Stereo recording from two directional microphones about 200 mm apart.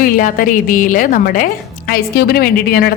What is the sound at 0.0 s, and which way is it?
A woman's voice, 45° left (ahead or behind).